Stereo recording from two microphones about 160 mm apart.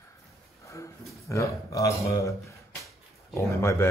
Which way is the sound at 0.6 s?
20° left (ahead or behind).